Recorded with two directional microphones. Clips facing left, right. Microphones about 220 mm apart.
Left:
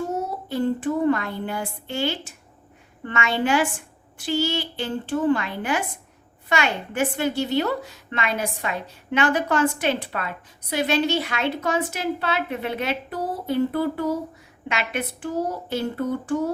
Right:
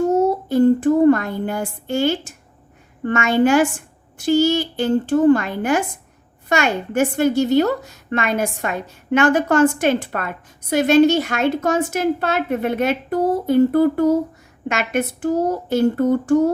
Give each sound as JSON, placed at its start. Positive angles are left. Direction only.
{"t": 0.1, "sound": "child singing", "side_deg": -45}
{"t": 3.0, "sound": "a woman's voice", "side_deg": -45}